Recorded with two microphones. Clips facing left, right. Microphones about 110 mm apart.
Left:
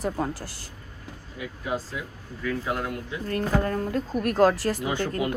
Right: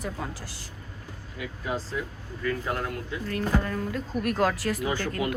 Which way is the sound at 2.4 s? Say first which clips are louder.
Left 1 dB; 5° left (ahead or behind).